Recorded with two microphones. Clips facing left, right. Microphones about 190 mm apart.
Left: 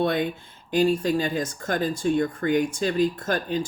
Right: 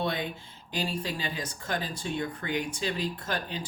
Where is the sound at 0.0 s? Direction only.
55° left (ahead or behind).